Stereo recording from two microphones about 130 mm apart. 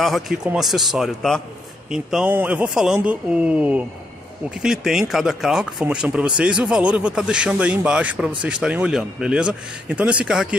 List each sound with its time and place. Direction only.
0.0 s speech: centre (ahead or behind)